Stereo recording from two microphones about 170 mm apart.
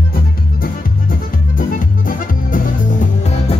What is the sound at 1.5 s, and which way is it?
Music, 55° left (ahead or behind).